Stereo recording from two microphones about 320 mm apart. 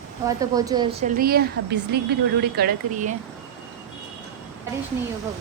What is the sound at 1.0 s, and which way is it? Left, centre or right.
Speech, right.